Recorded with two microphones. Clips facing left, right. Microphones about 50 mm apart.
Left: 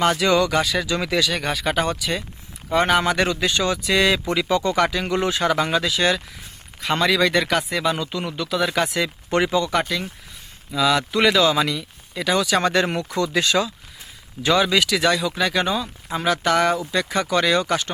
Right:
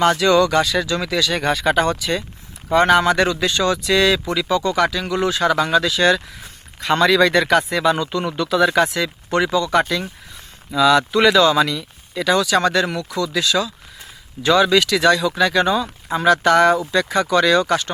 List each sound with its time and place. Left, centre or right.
0.2 s speech: centre
1.3 s speech: centre
9.0 s speech: centre
9.6 s speech: centre
12.7 s speech: left
14.4 s speech: centre